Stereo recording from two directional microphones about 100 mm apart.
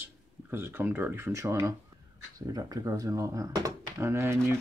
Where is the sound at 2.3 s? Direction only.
40° right (ahead or behind).